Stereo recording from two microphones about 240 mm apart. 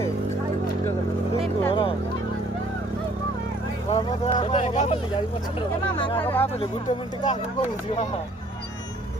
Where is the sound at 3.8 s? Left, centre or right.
Left.